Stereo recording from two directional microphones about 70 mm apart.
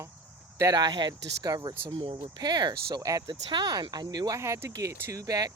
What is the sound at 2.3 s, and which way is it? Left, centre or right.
Speech, right.